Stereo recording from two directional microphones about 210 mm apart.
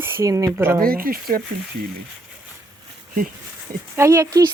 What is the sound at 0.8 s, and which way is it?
Speech, 45° right (ahead or behind).